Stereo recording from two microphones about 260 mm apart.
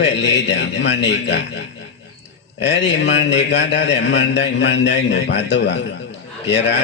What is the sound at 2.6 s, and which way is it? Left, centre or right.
A man's voice, left.